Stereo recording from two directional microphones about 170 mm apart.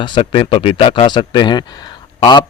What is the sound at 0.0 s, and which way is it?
Speech, 30° left (ahead or behind).